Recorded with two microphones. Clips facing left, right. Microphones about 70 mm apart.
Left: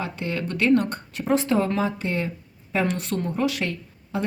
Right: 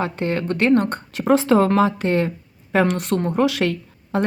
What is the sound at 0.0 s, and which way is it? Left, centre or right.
Speech, right.